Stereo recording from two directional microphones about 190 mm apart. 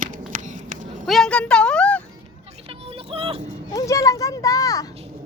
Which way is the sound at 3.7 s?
15° left (ahead or behind).